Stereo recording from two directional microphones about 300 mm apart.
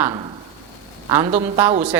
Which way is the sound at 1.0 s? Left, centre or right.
Centre.